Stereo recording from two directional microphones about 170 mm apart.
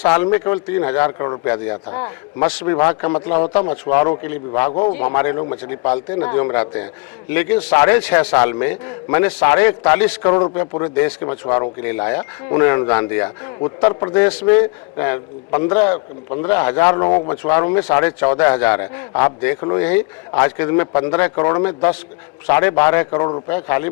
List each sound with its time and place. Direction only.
0.0 s a man's voice: 10° left (ahead or behind)
1.3 s a man's voice: 25° left (ahead or behind)
4.7 s speech: 35° left (ahead or behind)
5.1 s a man's voice: 15° left (ahead or behind)
5.8 s speech: 30° left (ahead or behind)
6.2 s a man's voice: 15° left (ahead or behind)
19.5 s a man's voice: 25° left (ahead or behind)
19.8 s a man's voice: 10° left (ahead or behind)